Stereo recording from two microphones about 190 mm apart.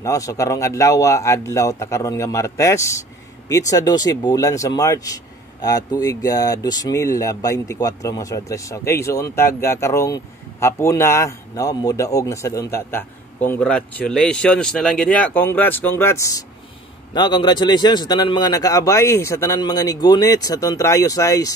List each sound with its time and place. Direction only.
0.0 s a man's voice: 15° left (ahead or behind)